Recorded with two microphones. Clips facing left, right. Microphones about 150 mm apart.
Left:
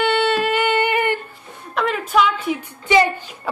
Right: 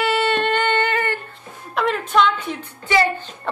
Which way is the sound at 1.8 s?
5° left (ahead or behind).